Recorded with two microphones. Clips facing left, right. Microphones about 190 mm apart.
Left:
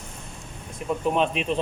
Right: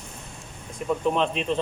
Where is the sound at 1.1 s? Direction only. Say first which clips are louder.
Left 1 dB; 15° left (ahead or behind).